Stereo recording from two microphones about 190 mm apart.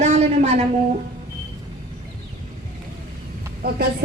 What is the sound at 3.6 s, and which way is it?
Speech, 55° right (ahead or behind).